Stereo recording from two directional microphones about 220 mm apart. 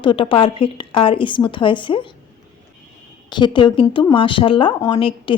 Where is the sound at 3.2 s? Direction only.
20° left (ahead or behind).